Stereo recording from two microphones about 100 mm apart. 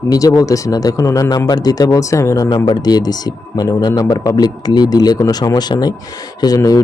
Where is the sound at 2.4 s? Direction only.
50° left (ahead or behind).